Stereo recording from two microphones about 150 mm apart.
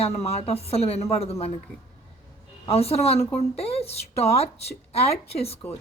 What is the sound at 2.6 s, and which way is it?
A woman's voice, 40° left (ahead or behind).